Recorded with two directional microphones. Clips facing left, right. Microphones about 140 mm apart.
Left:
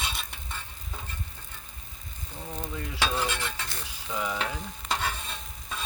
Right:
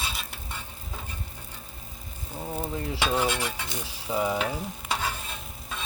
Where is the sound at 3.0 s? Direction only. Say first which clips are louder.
Right 3 dB; 15° right (ahead or behind).